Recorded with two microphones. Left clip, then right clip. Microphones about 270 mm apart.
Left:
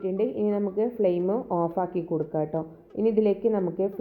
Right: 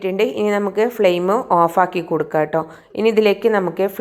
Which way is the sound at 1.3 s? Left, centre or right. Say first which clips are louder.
Right 12 dB; right.